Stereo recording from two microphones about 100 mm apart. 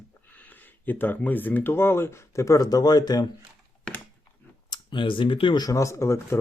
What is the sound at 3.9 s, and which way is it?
Speech, 10° left (ahead or behind).